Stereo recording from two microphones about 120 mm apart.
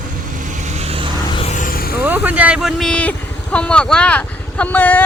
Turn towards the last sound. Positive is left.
turn(degrees=15)  # may be behind; listen again after turning